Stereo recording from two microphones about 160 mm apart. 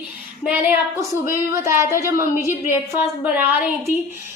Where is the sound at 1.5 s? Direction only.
15° right (ahead or behind).